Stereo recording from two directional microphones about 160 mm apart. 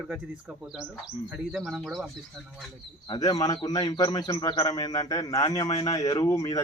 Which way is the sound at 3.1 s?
25° left (ahead or behind).